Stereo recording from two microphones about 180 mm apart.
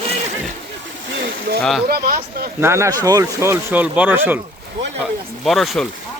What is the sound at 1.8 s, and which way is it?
Speech, 55° right (ahead or behind).